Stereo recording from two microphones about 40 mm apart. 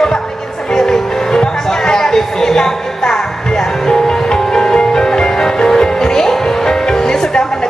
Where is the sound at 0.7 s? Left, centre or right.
Centre.